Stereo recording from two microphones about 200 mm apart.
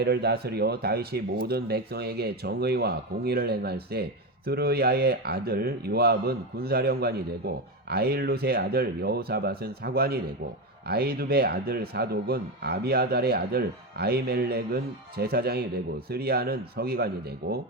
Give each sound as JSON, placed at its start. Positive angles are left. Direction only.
{"t": 0.0, "sound": "speech", "side_deg": -55}